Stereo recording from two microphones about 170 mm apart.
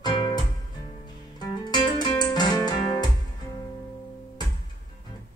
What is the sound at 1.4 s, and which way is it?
Music, 25° left (ahead or behind).